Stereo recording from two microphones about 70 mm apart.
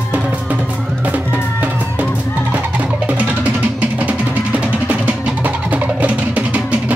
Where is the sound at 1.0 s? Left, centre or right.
Right.